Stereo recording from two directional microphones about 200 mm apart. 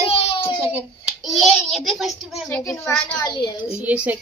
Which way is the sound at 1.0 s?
Centre (ahead or behind).